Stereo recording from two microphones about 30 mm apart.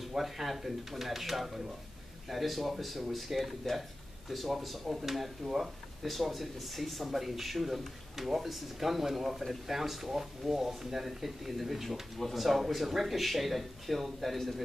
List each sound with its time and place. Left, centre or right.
0.2 s speech: centre
4.8 s speech: centre
6.0 s speech: centre